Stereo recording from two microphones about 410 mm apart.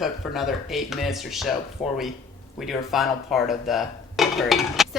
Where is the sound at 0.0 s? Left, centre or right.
Centre.